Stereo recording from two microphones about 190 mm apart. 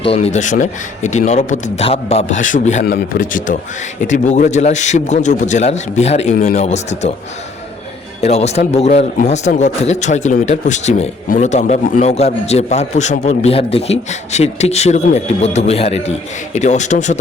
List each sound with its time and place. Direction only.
0.0 s a man's voice: 35° left (ahead or behind)
8.2 s a man's voice: 35° left (ahead or behind)